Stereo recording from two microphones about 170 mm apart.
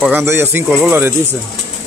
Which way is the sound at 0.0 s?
15° right (ahead or behind).